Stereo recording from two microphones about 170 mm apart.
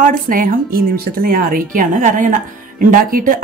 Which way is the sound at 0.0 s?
55° right (ahead or behind).